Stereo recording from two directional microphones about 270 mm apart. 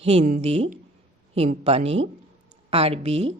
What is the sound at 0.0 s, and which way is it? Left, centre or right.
A woman's voice, right.